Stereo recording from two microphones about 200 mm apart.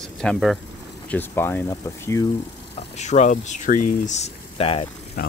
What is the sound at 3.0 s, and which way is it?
Speech, 35° left (ahead or behind).